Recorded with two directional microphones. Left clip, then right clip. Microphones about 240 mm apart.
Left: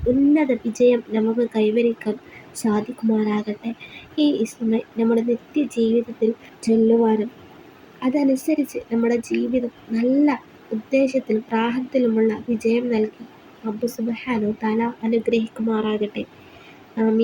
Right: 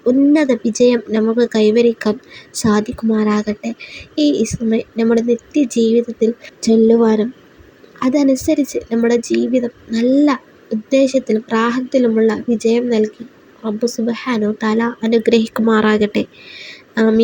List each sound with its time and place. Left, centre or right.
0.3 s speech: right